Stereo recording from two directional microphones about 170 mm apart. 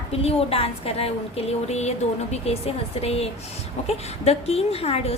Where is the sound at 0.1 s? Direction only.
35° left (ahead or behind).